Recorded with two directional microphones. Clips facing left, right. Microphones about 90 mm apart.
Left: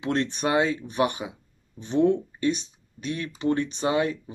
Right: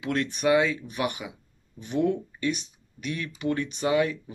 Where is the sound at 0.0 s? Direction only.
30° left (ahead or behind).